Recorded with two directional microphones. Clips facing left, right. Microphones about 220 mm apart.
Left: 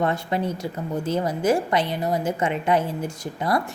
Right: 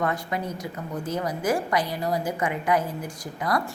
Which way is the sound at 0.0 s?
30° left (ahead or behind).